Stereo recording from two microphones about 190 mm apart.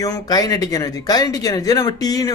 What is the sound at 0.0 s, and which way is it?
Speech, 20° left (ahead or behind).